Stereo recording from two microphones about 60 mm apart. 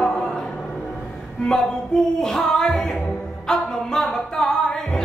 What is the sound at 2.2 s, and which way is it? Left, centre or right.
Music, centre.